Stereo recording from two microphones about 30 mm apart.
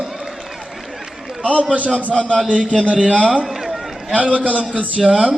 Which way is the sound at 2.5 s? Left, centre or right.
Right.